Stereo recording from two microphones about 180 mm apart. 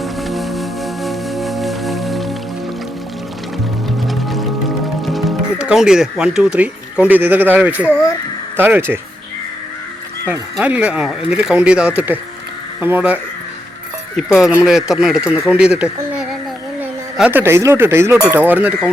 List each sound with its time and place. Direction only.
0.0 s music: centre (ahead or behind)
4.0 s music: centre (ahead or behind)
8.5 s speech: 10° right (ahead or behind)
10.2 s speech: 10° right (ahead or behind)
14.2 s speech: centre (ahead or behind)